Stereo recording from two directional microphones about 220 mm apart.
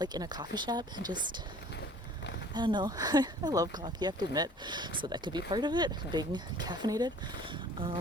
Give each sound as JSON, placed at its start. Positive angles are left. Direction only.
{"t": 0.0, "sound": "speech", "side_deg": -20}
{"t": 2.6, "sound": "speech", "side_deg": -20}